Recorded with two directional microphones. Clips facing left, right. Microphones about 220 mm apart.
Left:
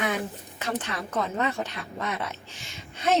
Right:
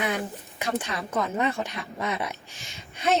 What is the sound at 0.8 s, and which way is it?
A woman's voice, 10° right (ahead or behind).